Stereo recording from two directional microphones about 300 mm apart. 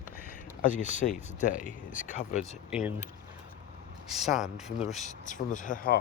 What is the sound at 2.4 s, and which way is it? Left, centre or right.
Speech, centre.